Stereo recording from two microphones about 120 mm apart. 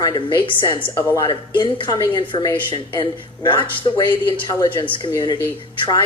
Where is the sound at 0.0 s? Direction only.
40° left (ahead or behind).